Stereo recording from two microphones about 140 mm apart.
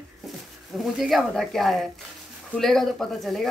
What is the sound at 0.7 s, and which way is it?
Speech, centre (ahead or behind).